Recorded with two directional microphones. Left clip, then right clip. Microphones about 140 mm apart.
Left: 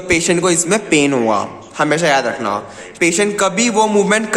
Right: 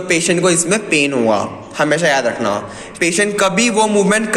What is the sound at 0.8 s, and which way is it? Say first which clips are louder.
A man's voice: left 1 dB; 25° left (ahead or behind).